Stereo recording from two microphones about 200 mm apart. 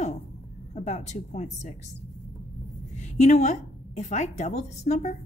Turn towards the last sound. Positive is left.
turn(degrees=35)  # may be behind; listen again after turning